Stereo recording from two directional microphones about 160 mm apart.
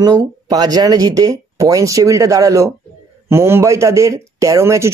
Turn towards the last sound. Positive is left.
turn(degrees=-15)  # may be behind; listen again after turning